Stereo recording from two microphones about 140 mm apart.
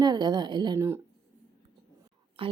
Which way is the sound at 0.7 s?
15° right (ahead or behind).